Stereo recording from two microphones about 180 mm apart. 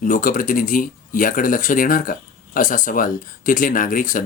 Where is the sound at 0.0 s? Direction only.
50° left (ahead or behind).